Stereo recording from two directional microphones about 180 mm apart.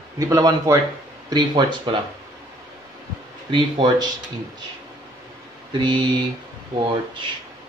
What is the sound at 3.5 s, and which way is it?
Speech, 25° right (ahead or behind).